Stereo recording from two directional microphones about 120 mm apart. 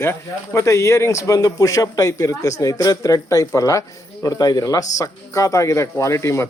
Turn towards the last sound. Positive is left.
turn(degrees=25)  # may be behind; listen again after turning